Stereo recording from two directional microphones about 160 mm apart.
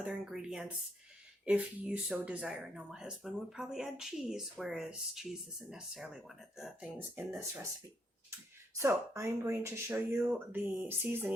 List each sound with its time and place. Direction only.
0.0 s speech: 5° right (ahead or behind)
8.8 s speech: 20° right (ahead or behind)